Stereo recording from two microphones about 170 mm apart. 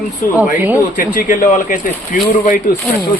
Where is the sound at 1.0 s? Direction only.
55° left (ahead or behind).